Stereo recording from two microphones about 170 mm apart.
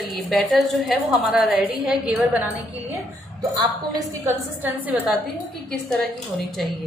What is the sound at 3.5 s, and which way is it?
A woman's voice, 20° right (ahead or behind).